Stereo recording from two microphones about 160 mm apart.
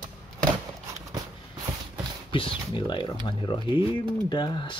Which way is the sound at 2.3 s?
35° left (ahead or behind).